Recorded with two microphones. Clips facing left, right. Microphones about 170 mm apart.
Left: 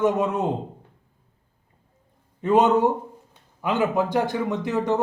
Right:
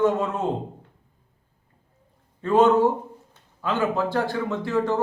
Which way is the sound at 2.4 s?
20° left (ahead or behind).